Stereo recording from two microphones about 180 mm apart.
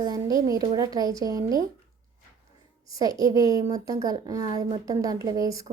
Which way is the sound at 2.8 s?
20° right (ahead or behind).